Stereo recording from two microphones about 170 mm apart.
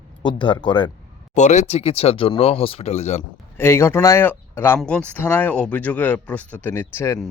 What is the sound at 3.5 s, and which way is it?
Speech, 15° left (ahead or behind).